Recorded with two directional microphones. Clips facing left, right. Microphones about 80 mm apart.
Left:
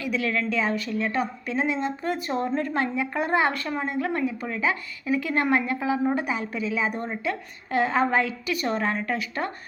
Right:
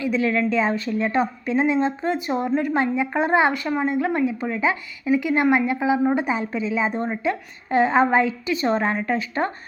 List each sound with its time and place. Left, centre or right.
0.0 s a woman's voice: right